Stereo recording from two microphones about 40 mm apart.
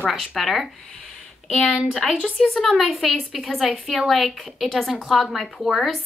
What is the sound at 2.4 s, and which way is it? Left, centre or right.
Speech, centre.